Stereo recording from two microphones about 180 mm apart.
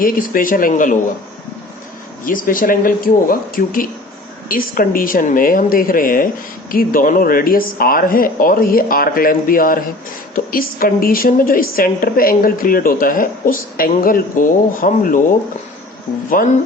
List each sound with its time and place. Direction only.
0.0 s a woman's voice: 50° left (ahead or behind)
2.2 s a woman's voice: 50° left (ahead or behind)
16.4 s a woman's voice: 50° left (ahead or behind)